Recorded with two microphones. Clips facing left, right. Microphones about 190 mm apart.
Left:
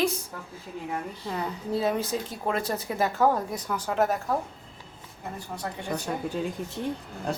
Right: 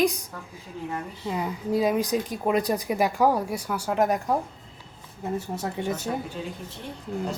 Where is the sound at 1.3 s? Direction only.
10° right (ahead or behind).